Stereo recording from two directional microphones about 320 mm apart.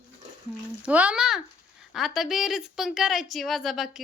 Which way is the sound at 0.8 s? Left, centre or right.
Centre.